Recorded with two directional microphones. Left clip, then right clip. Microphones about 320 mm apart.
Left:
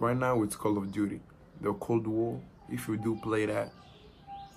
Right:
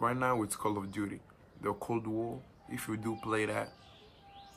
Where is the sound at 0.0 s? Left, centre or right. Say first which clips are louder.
Left 3 dB; centre.